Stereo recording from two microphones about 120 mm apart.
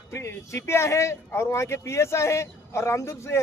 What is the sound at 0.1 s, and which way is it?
Speech, 25° left (ahead or behind).